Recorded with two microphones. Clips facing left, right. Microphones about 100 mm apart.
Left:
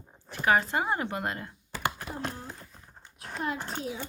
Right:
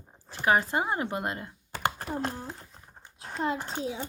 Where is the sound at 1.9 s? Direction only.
35° right (ahead or behind).